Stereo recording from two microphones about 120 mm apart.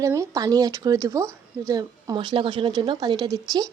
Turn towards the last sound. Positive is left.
turn(degrees=-30)  # may be behind; listen again after turning